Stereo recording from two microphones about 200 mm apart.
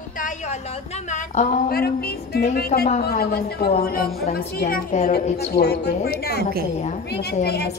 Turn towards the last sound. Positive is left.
turn(degrees=55)  # may be behind; listen again after turning